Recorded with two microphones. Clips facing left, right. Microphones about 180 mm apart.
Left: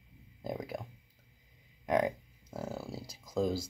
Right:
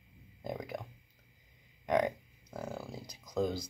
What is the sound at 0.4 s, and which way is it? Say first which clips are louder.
Speech: left 1 dB; centre (ahead or behind).